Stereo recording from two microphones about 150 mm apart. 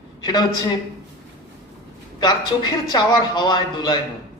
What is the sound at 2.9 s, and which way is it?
A man's voice, 30° left (ahead or behind).